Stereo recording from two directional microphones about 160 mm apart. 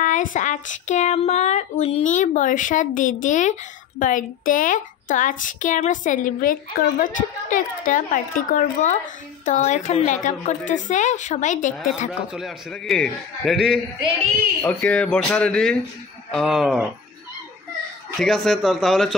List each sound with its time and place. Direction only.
0.0 s a woman's voice: 55° left (ahead or behind)
2.0 s a woman's voice: 50° left (ahead or behind)
12.3 s a man's voice: centre (ahead or behind)
18.2 s a man's voice: centre (ahead or behind)